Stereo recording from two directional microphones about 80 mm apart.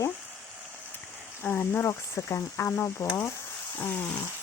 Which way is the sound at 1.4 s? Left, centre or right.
Left.